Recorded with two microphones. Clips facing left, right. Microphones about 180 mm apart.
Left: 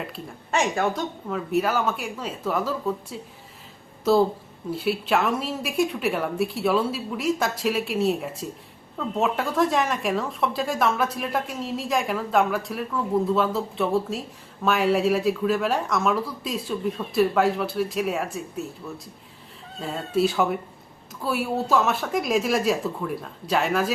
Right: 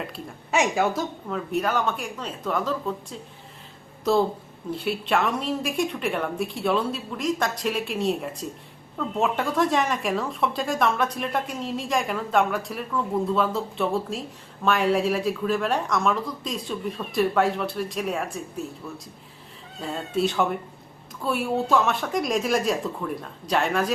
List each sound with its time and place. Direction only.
0.5 s speech: 5° right (ahead or behind)
19.8 s speech: centre (ahead or behind)